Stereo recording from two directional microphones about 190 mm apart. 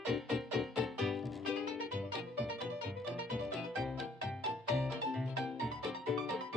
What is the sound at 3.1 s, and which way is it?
Music, centre (ahead or behind).